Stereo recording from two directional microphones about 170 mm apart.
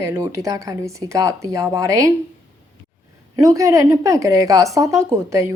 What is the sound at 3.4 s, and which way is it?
A woman's voice, 20° right (ahead or behind).